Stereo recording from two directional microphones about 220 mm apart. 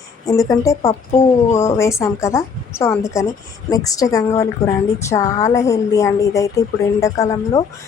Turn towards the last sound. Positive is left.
turn(degrees=15)  # may be behind; listen again after turning